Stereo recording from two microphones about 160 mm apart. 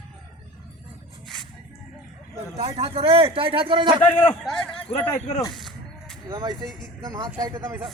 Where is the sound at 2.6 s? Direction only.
40° right (ahead or behind).